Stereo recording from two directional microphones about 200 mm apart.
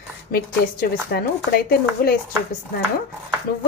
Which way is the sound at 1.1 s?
50° left (ahead or behind).